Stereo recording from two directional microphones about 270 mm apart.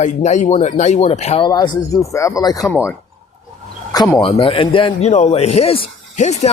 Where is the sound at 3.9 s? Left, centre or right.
Centre.